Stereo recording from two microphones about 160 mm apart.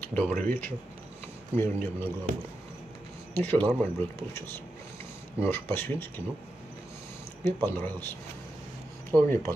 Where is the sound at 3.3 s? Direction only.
10° left (ahead or behind).